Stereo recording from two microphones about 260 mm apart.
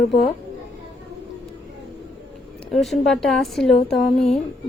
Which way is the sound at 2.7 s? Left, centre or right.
Centre.